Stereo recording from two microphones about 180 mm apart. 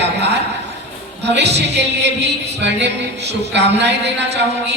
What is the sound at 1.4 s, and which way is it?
Music, 70° right (ahead or behind).